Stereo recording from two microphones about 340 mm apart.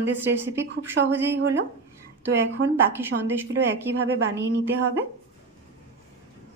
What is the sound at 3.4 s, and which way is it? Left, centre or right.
Speech, right.